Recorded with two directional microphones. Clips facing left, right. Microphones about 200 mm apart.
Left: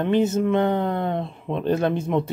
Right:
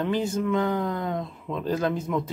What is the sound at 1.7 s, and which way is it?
Speech, 25° left (ahead or behind).